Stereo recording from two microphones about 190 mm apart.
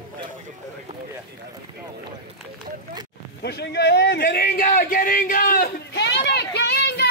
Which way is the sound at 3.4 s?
60° left (ahead or behind).